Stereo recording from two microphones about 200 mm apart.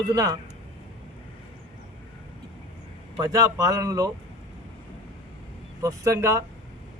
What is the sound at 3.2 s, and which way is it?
Speech, 15° right (ahead or behind).